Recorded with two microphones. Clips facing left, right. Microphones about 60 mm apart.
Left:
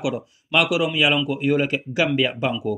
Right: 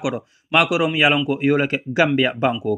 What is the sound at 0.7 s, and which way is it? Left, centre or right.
Speech, right.